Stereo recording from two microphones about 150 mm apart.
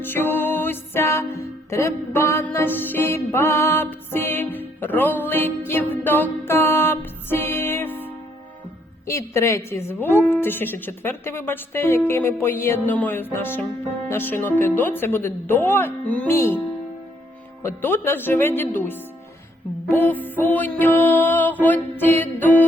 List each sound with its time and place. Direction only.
0.0 s music: 15° left (ahead or behind)
17.6 s music: 15° left (ahead or behind)